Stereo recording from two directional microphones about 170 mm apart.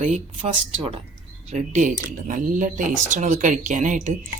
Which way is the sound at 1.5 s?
45° right (ahead or behind).